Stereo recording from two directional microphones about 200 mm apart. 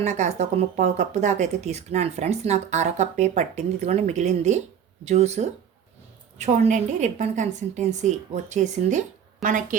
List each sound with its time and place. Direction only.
0.0 s speech: 35° right (ahead or behind)